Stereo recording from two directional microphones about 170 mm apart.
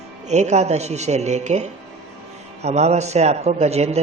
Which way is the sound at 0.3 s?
40° right (ahead or behind).